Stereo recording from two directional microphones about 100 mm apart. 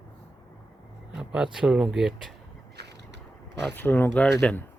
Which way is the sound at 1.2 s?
10° right (ahead or behind).